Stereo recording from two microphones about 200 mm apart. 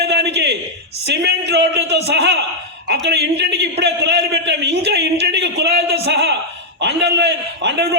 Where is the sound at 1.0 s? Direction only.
55° right (ahead or behind).